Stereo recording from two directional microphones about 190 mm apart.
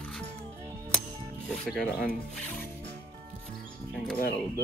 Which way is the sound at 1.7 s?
5° left (ahead or behind).